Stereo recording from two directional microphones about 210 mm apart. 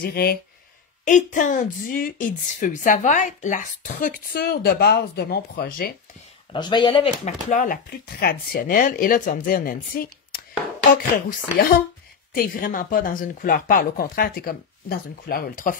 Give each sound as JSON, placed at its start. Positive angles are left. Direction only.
{"t": 0.0, "sound": "speech", "side_deg": 45}
{"t": 1.0, "sound": "a woman's voice", "side_deg": 35}
{"t": 6.5, "sound": "speech", "side_deg": 20}
{"t": 7.4, "sound": "a woman's voice", "side_deg": 40}